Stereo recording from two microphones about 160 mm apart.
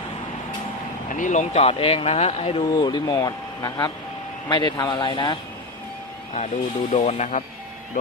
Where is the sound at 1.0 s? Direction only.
50° left (ahead or behind); by 5.4 s 30° left (ahead or behind).